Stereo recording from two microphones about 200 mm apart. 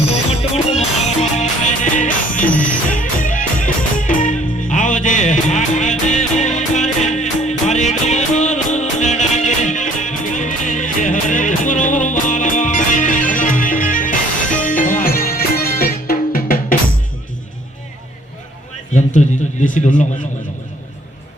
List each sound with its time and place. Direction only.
0.1 s music: 30° left (ahead or behind)
19.2 s a sound: 35° left (ahead or behind)
19.6 s speech: 40° left (ahead or behind)